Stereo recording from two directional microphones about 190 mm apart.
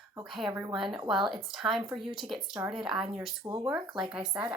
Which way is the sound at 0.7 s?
Centre (ahead or behind).